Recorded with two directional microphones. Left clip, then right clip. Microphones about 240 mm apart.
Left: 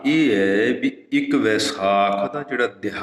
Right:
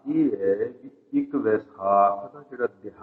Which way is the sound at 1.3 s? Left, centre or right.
Left.